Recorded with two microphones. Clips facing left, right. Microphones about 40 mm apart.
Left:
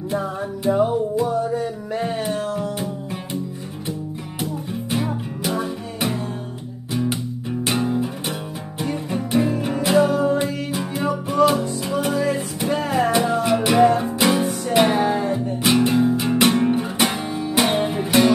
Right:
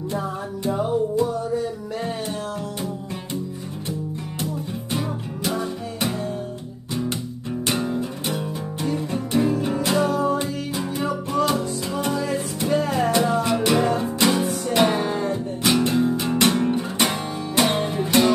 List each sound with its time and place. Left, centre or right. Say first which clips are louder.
0.7 s music: left 3 dB; centre
4.9 s music: left 3 dB; centre